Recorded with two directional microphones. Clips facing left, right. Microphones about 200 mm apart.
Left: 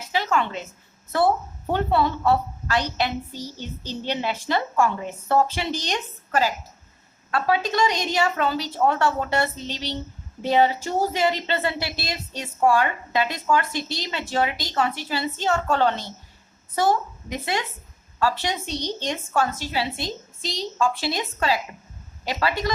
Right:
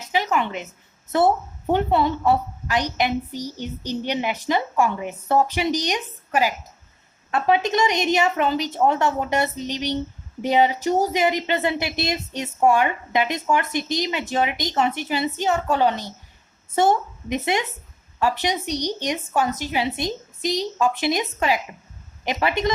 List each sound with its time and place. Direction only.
0.1 s a sound: 15° right (ahead or behind)
1.1 s a woman's voice: 20° right (ahead or behind)
16.7 s a woman's voice: 25° right (ahead or behind)